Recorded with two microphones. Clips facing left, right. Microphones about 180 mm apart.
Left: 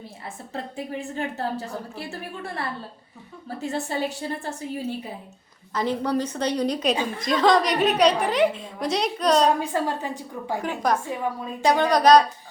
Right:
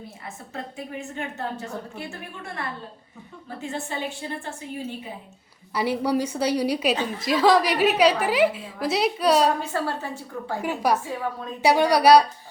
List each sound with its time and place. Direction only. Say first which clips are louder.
0.5 s a woman's voice: left 3 dB; 35° left (ahead or behind)
5.7 s a woman's voice: right 1 dB; 10° right (ahead or behind)
9.6 s a woman's voice: left 2 dB; 15° left (ahead or behind)
10.6 s a woman's voice: right 2 dB; 10° right (ahead or behind)
11.1 s a woman's voice: left 1 dB; 15° left (ahead or behind)
11.6 s a woman's voice: right 1 dB; 10° right (ahead or behind)